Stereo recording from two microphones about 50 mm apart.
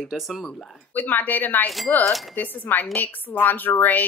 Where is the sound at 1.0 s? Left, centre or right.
Left.